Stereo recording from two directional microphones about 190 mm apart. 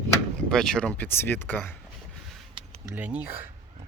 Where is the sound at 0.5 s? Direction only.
5° left (ahead or behind).